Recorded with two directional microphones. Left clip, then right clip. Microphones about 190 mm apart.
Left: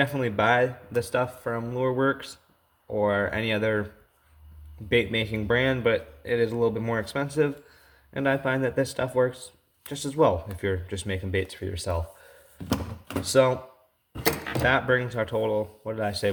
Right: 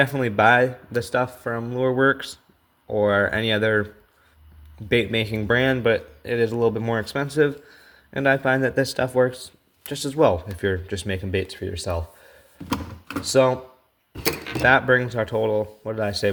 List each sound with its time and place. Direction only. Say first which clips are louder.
0.0 s speech: right 6 dB; 35° right (ahead or behind)
4.9 s speech: right 3 dB; 35° right (ahead or behind)
12.6 s a sound: right 2 dB; 30° left (ahead or behind)
13.2 s speech: right 3 dB; 30° right (ahead or behind)
14.6 s speech: right 6 dB; 35° right (ahead or behind)